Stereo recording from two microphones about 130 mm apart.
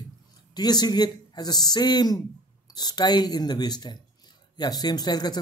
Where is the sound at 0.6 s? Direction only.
30° left (ahead or behind).